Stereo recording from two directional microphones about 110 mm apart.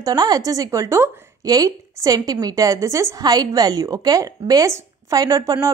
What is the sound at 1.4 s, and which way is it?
A woman's voice, 35° right (ahead or behind).